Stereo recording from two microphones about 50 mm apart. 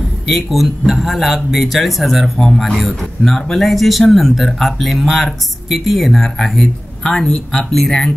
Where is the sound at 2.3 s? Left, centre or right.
Centre.